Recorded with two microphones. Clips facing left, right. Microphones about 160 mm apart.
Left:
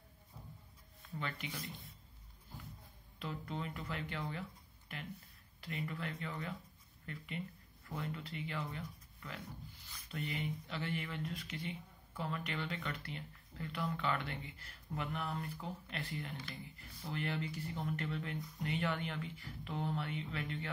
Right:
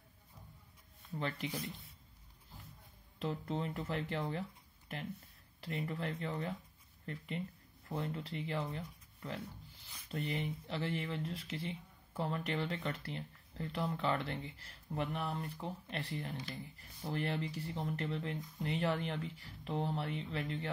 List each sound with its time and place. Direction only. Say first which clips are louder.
1.2 s speech: right 5 dB; 30° right (ahead or behind)
3.2 s speech: right 5 dB; 30° right (ahead or behind)